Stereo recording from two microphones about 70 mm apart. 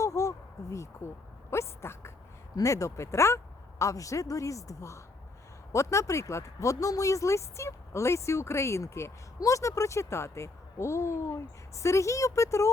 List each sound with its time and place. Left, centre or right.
0.0 s speech: left
2.6 s speech: left